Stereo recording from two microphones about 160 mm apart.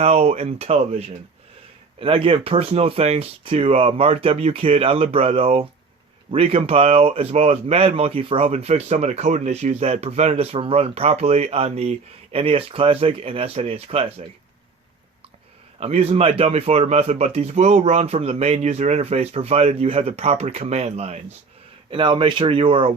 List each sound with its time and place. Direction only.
0.0 s speech: 40° right (ahead or behind)
15.8 s speech: 40° right (ahead or behind)
21.8 s speech: 30° right (ahead or behind)